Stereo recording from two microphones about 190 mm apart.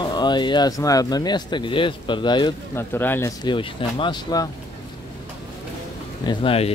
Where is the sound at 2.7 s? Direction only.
10° left (ahead or behind).